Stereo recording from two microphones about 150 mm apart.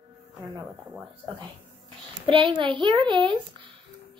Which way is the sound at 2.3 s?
35° right (ahead or behind).